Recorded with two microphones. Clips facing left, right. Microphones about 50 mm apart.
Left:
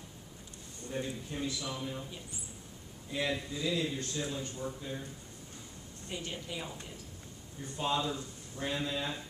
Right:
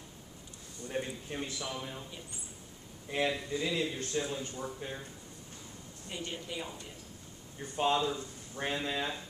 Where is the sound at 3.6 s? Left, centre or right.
Right.